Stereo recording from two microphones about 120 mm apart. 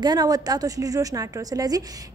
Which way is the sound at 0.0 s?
35° right (ahead or behind).